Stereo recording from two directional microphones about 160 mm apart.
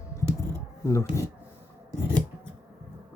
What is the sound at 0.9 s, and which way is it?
Speech, 20° left (ahead or behind).